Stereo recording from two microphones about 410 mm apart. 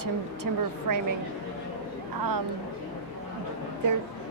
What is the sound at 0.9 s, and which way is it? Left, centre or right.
Speech, right.